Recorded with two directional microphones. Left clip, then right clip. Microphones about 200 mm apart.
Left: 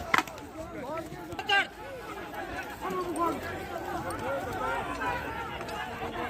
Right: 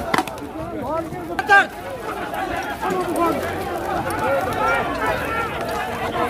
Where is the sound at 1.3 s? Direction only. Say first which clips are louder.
Right 13 dB; 35° right (ahead or behind).